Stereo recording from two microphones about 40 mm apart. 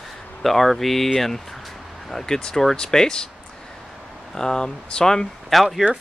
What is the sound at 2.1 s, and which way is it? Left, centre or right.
Speech, centre.